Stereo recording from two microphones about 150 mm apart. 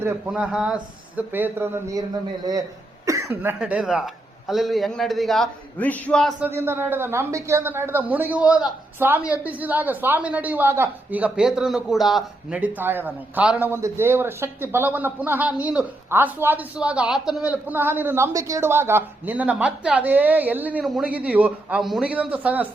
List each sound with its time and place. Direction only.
0.3 s a woman's voice: 5° right (ahead or behind)
3.1 s a sound: 20° right (ahead or behind)
3.6 s a man's voice: 5° right (ahead or behind)
6.4 s a woman's voice: 15° right (ahead or behind)